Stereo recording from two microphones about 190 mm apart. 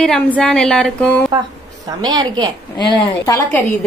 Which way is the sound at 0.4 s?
5° left (ahead or behind).